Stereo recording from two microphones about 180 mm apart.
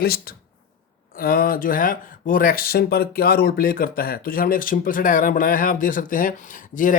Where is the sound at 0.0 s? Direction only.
55° left (ahead or behind).